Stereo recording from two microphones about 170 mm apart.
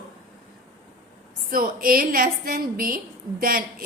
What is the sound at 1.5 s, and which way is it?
A woman's voice, 60° right (ahead or behind).